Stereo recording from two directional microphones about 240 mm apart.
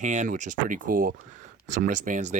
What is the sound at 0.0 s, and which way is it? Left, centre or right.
Speech, right.